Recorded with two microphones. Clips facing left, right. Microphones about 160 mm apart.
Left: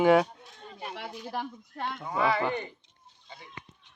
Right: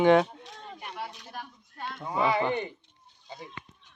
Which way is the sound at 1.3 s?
90° left.